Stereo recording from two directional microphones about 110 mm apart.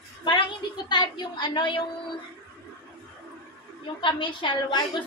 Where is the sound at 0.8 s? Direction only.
45° left (ahead or behind).